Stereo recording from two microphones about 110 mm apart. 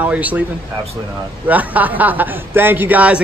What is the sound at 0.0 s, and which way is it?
Speech, 15° right (ahead or behind).